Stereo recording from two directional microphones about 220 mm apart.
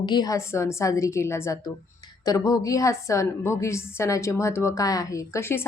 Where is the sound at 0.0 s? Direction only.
20° left (ahead or behind).